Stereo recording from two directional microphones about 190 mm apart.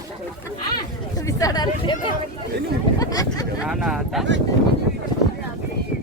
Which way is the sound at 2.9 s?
20° left (ahead or behind).